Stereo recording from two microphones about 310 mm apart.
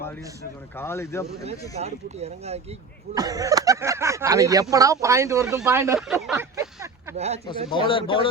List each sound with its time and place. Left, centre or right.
0.8 s a man's voice: centre
1.7 s speech: right
7.7 s a man's voice: centre